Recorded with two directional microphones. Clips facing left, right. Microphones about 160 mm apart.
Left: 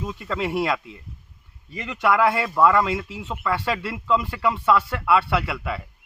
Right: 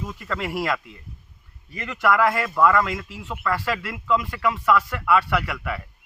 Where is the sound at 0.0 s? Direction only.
20° left (ahead or behind).